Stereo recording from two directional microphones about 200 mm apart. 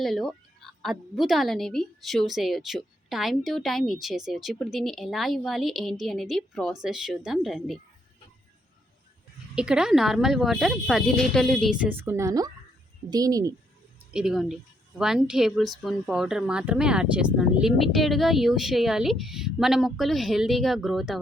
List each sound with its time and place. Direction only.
0.0 s a woman's voice: centre (ahead or behind)
9.6 s a woman's voice: 5° right (ahead or behind)
14.1 s a woman's voice: 5° right (ahead or behind)